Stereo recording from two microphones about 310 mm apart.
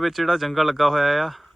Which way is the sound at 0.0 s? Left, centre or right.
Centre.